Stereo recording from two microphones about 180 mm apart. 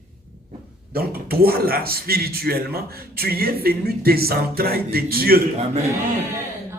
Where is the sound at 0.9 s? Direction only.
55° right (ahead or behind).